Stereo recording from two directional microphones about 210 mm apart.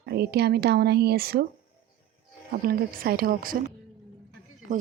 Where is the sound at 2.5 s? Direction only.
45° right (ahead or behind).